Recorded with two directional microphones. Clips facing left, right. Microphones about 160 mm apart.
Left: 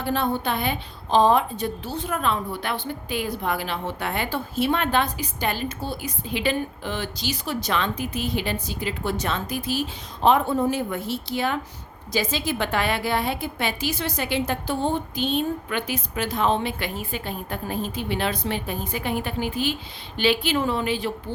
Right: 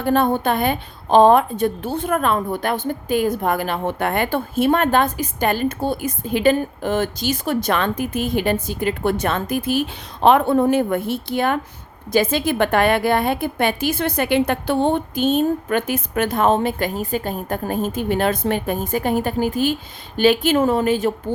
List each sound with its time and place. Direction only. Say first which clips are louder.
0.0 s a woman's voice: right 7 dB; 50° right (ahead or behind)